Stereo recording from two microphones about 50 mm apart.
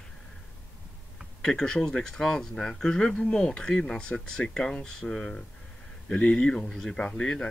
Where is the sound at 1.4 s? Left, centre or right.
Centre.